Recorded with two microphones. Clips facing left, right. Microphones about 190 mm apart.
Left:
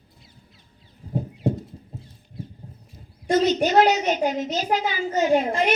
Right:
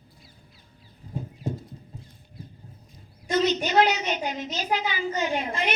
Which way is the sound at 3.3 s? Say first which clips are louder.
Left 4 dB; 45° left (ahead or behind).